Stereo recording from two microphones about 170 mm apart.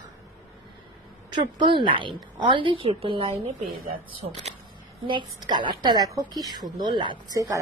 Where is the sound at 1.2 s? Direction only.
25° right (ahead or behind).